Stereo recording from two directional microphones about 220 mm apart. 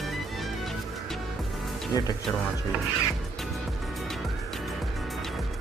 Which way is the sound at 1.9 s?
15° left (ahead or behind).